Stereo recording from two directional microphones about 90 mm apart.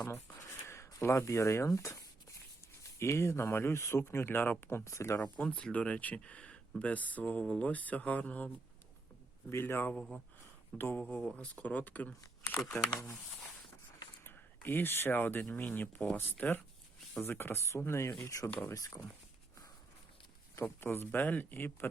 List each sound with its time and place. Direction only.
0.7 s speech: 30° left (ahead or behind)
3.0 s speech: 30° left (ahead or behind)
5.2 s speech: 15° left (ahead or behind)
9.9 s speech: 10° left (ahead or behind)
10.8 s speech: 20° left (ahead or behind)
11.0 s speech: 10° left (ahead or behind)
14.3 s speech: 25° left (ahead or behind); by 19.0 s 45° left (ahead or behind)
20.6 s speech: 25° left (ahead or behind)